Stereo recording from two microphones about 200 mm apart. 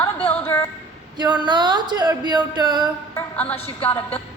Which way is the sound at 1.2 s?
20° right (ahead or behind).